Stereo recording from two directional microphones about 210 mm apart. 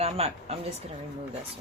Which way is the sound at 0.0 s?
30° right (ahead or behind).